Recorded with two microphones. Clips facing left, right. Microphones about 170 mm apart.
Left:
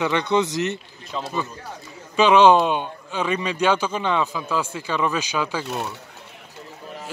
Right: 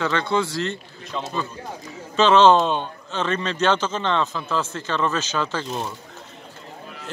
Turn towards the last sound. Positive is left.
turn(degrees=10)  # may be behind; listen again after turning